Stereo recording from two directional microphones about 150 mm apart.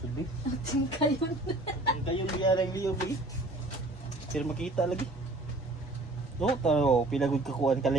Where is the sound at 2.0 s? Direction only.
35° left (ahead or behind).